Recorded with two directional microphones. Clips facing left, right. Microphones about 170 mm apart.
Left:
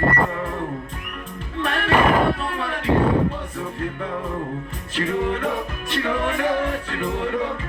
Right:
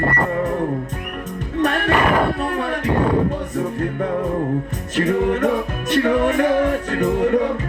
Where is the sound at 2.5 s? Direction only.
50° right (ahead or behind).